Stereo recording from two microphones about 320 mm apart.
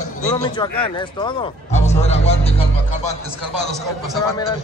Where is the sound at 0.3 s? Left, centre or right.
Centre.